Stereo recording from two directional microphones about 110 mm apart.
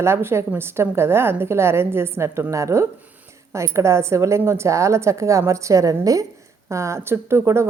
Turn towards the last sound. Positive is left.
turn(degrees=-25)  # may be behind; listen again after turning